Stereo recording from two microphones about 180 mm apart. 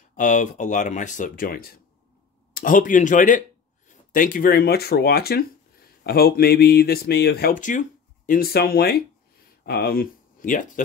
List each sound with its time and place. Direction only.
0.1 s speech: 45° left (ahead or behind)
8.3 s speech: 55° left (ahead or behind)